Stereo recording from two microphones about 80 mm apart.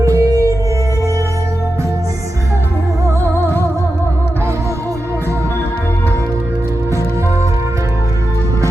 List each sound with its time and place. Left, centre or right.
0.0 s music: right